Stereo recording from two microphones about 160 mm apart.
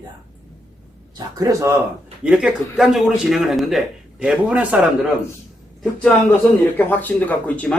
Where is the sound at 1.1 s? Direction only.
20° right (ahead or behind).